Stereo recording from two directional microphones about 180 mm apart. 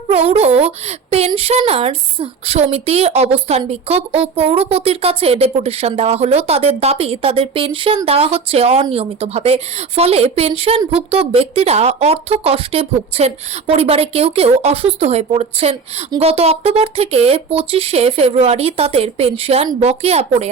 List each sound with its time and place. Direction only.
0.1 s speech: 35° right (ahead or behind)